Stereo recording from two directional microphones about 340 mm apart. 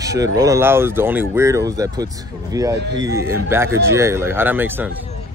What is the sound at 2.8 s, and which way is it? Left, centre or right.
Speech, right.